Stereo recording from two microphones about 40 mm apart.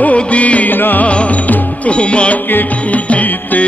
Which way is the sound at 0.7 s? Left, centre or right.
Left.